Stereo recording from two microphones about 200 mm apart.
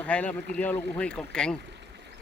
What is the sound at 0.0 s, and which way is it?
Speech, 5° left (ahead or behind).